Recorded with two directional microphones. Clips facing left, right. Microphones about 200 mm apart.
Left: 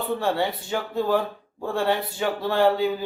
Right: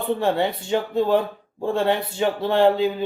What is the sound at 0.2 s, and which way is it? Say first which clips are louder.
Speech: right 3 dB; 20° right (ahead or behind).